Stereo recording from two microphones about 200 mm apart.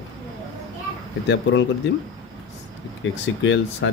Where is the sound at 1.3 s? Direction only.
65° left (ahead or behind).